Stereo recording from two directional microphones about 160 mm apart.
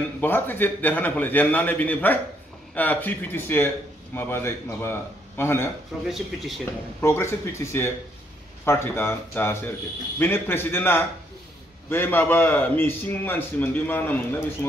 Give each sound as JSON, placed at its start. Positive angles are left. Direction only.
{"t": 0.2, "sound": "a man's voice", "side_deg": 10}